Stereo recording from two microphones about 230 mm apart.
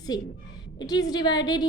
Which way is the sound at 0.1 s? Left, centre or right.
Centre.